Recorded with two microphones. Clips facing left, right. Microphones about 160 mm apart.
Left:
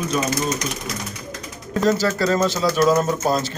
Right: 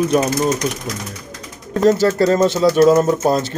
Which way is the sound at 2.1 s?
55° right (ahead or behind).